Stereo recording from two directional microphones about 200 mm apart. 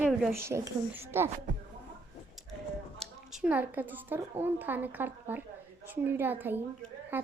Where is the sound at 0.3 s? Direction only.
15° right (ahead or behind).